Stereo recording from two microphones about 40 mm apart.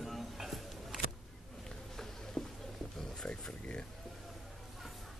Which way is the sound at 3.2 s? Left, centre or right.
Left.